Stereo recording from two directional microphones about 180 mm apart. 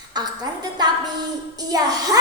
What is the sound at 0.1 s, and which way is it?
A woman's voice, 20° right (ahead or behind).